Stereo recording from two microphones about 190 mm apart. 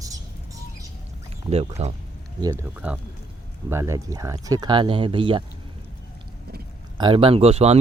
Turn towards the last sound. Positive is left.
turn(degrees=-35)  # may be behind; listen again after turning